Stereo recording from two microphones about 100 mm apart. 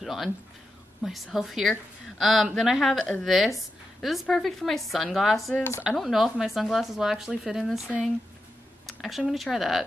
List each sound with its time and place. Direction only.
0.0 s a woman's voice: centre (ahead or behind)
5.5 s speech: 20° left (ahead or behind)
5.9 s a woman's voice: centre (ahead or behind)